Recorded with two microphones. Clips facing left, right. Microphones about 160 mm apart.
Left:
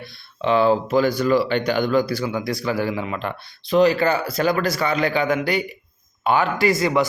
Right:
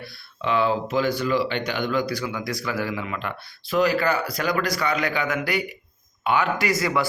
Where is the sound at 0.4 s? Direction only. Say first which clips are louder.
Left 5 dB; 35° left (ahead or behind).